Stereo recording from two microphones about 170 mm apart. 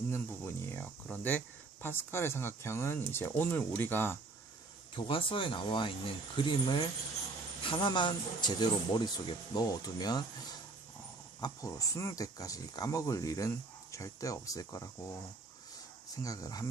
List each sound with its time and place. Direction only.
0.1 s a sound: 15° left (ahead or behind)
1.8 s speech: 15° left (ahead or behind)
4.9 s speech: 30° left (ahead or behind)
16.2 s speech: 20° left (ahead or behind)